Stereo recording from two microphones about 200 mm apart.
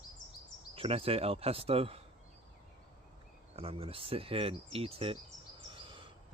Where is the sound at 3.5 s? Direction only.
30° right (ahead or behind).